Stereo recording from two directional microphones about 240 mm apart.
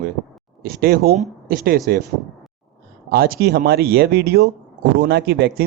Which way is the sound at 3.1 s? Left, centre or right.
Right.